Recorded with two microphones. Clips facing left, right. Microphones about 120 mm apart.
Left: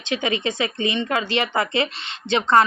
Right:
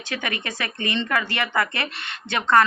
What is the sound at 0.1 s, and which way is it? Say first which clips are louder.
Speech: left 6 dB; 20° left (ahead or behind).